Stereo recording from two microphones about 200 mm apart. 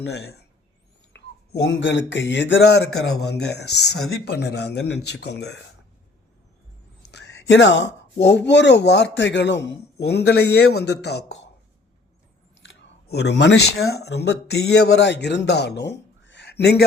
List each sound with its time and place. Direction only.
0.0 s speech: 55° left (ahead or behind)
7.1 s speech: 60° left (ahead or behind)
12.6 s speech: 55° left (ahead or behind)